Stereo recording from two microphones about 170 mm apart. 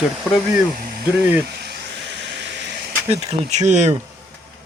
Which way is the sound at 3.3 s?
40° right (ahead or behind).